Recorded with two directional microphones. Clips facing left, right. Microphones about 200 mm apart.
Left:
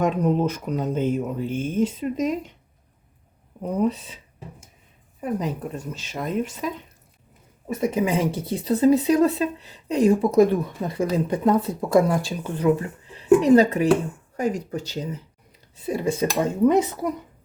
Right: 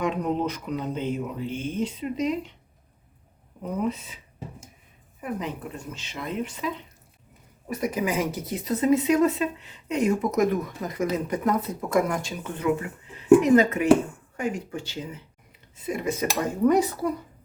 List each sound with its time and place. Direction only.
0.0 s speech: 45° left (ahead or behind)
3.8 s speech: 30° left (ahead or behind)
5.2 s speech: 40° left (ahead or behind)
7.7 s speech: 25° left (ahead or behind)
16.4 s dishes: 25° left (ahead or behind)